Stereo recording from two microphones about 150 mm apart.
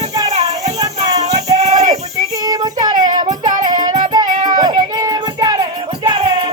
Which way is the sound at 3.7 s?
30° right (ahead or behind).